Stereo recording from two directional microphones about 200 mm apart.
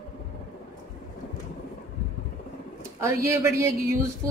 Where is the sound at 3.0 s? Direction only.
15° right (ahead or behind).